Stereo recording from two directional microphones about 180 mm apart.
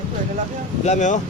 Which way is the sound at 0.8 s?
40° left (ahead or behind).